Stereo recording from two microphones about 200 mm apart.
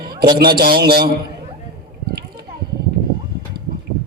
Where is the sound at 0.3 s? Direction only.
50° right (ahead or behind).